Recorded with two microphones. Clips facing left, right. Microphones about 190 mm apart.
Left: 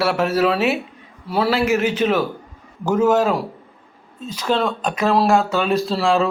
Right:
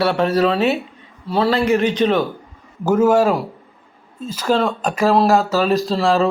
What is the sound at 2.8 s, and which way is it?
Speech, 10° right (ahead or behind).